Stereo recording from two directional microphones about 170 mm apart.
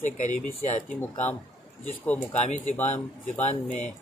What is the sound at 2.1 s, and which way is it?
Speech, 10° left (ahead or behind).